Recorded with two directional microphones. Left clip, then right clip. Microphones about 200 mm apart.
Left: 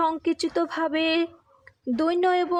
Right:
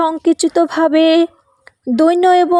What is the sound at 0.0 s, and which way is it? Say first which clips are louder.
A woman's voice: right 10 dB; 35° right (ahead or behind).